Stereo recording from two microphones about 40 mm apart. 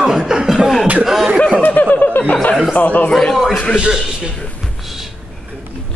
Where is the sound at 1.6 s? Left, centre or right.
Left.